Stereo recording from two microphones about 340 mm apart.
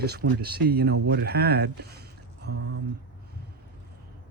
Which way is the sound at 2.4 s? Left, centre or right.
Right.